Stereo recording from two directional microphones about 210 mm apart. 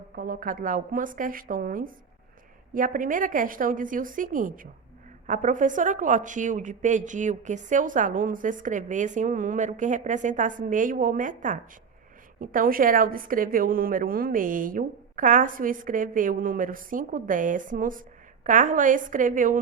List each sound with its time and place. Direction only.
0.2 s a woman's voice: 45° right (ahead or behind)